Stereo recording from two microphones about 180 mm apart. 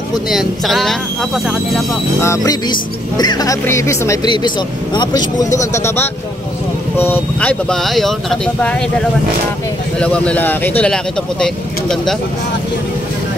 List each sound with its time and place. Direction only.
0.3 s speech: centre (ahead or behind)
2.2 s speech: 15° left (ahead or behind)
9.9 s speech: 5° left (ahead or behind)